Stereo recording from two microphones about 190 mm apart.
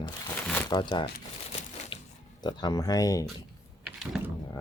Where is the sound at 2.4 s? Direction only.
20° left (ahead or behind).